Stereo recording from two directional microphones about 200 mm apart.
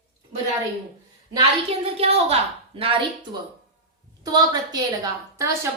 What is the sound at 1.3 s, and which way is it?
A woman's voice, 30° right (ahead or behind).